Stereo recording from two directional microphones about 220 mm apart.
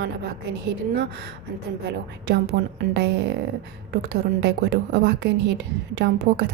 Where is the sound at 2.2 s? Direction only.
50° right (ahead or behind).